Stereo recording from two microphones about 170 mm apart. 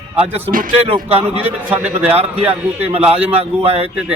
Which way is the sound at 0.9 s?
35° right (ahead or behind).